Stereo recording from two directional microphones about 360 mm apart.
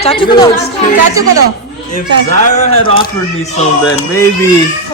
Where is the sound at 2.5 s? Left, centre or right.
Centre.